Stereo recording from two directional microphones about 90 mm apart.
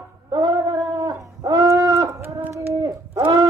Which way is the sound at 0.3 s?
45° right (ahead or behind).